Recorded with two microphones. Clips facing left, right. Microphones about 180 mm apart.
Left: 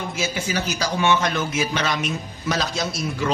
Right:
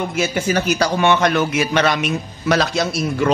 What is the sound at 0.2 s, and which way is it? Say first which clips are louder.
A man's voice: right 6 dB; 55° right (ahead or behind).